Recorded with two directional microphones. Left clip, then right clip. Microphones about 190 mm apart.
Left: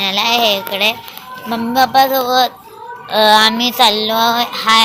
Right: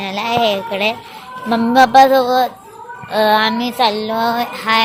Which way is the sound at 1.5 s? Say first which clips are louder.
Right 3 dB; 30° right (ahead or behind).